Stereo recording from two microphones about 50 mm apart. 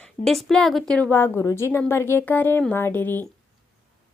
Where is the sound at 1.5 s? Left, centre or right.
Left.